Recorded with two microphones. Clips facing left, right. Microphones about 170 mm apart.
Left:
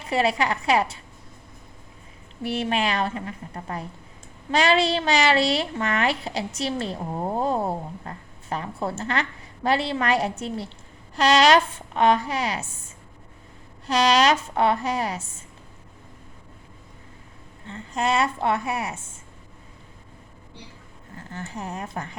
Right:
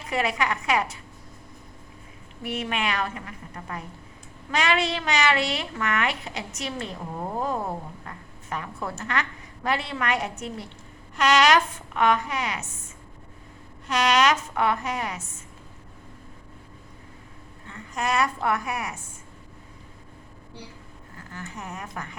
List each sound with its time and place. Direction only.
0.1 s speech: 30° left (ahead or behind)
2.4 s speech: 30° left (ahead or behind)
17.7 s a woman's voice: 30° left (ahead or behind)
21.2 s speech: 30° left (ahead or behind)